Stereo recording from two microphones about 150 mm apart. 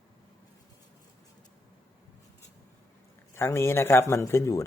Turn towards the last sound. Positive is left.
turn(degrees=20)  # may be behind; listen again after turning